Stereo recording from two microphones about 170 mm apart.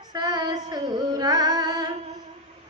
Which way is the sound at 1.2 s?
20° right (ahead or behind).